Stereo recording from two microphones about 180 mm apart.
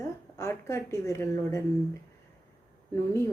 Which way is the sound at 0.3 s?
15° left (ahead or behind).